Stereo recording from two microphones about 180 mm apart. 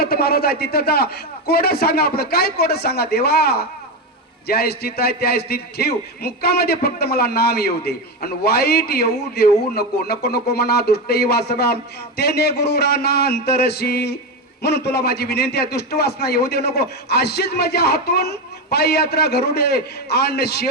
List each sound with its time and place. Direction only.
0.0 s a man's voice: 60° left (ahead or behind)